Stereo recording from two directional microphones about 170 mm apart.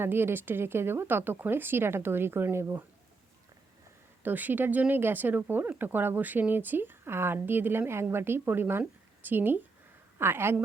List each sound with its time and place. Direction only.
0.0 s speech: 15° right (ahead or behind)
4.2 s speech: 10° right (ahead or behind)